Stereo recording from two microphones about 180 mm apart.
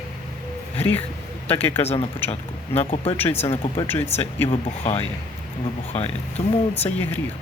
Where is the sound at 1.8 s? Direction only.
35° left (ahead or behind).